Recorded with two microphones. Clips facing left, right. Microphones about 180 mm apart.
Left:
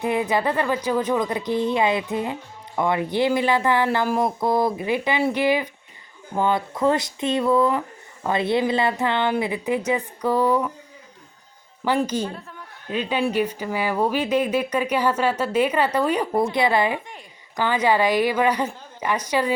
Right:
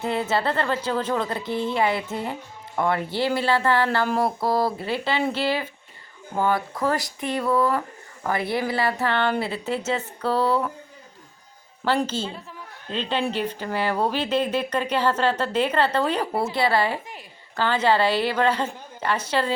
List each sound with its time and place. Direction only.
0.0 s a woman's voice: 15° left (ahead or behind)
11.9 s a woman's voice: 15° left (ahead or behind)
16.2 s speech: 5° right (ahead or behind)
16.5 s a woman's voice: 20° left (ahead or behind)